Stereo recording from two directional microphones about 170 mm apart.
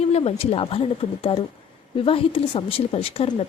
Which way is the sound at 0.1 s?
35° left (ahead or behind).